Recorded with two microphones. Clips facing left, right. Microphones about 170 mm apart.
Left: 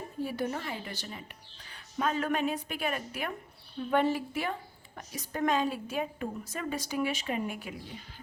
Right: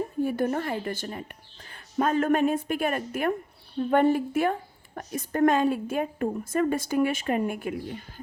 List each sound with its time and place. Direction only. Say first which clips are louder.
0.2 s a woman's voice: right 6 dB; 50° right (ahead or behind)